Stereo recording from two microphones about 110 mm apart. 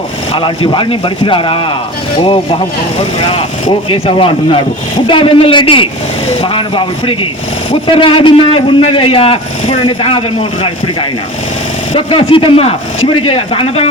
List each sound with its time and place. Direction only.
0.3 s speech: 50° left (ahead or behind)
3.8 s a man's voice: 55° left (ahead or behind)
11.9 s a man's voice: 55° left (ahead or behind)